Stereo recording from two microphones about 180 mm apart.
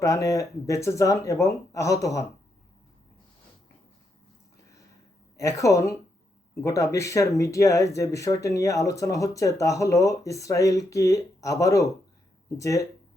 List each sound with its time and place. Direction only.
0.0 s speech: 20° left (ahead or behind)
5.4 s speech: 15° left (ahead or behind)